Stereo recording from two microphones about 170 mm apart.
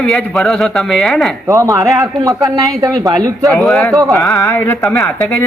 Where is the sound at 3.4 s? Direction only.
Centre (ahead or behind).